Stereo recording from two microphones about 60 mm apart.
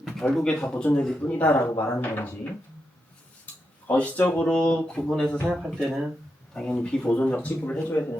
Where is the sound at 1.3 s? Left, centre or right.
Left.